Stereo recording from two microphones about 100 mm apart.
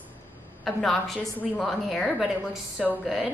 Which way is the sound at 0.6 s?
Centre (ahead or behind).